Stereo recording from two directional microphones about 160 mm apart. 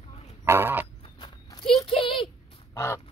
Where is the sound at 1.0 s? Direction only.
30° left (ahead or behind).